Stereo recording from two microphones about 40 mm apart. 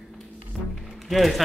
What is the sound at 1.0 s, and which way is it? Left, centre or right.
Speech, centre.